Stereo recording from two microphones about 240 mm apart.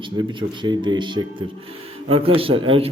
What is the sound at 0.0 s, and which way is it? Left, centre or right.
A man's voice, centre.